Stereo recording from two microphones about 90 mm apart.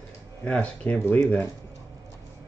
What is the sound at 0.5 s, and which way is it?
Speech, 20° left (ahead or behind).